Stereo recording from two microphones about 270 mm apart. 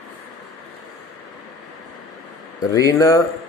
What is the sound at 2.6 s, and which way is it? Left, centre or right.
Speech, centre.